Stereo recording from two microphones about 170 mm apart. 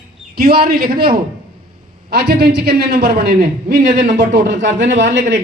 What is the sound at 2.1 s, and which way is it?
A man's voice, 75° right (ahead or behind).